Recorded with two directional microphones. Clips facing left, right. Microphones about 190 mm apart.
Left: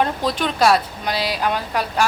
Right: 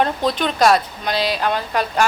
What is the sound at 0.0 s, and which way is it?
A woman's voice, 5° left (ahead or behind).